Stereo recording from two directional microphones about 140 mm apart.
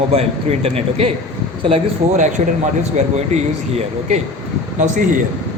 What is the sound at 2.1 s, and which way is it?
Speech, 60° right (ahead or behind).